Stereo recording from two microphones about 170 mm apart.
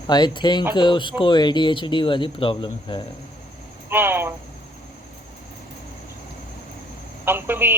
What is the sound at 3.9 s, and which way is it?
Speech, 10° right (ahead or behind).